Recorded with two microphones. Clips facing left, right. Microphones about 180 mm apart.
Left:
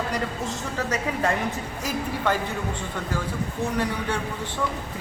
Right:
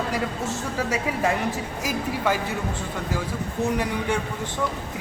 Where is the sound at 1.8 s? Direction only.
10° right (ahead or behind).